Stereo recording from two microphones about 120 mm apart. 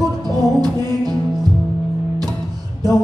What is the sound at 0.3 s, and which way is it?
Music, 35° right (ahead or behind).